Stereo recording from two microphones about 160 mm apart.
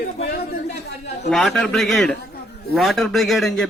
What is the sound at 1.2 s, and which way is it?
A man's voice, centre (ahead or behind).